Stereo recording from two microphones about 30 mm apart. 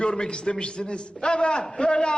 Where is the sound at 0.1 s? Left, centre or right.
Left.